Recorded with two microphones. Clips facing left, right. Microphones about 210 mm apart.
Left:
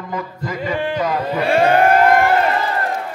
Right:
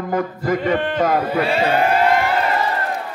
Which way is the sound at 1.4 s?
55° left (ahead or behind).